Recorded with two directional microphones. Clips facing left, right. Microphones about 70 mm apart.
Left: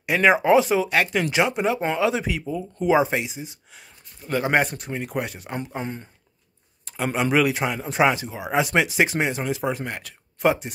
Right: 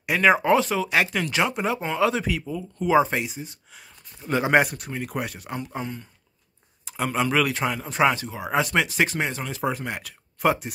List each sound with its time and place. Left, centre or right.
0.2 s speech: centre
0.8 s speech: centre
4.2 s speech: centre
5.8 s speech: left
6.8 s a sound: centre
7.2 s speech: centre
9.6 s speech: centre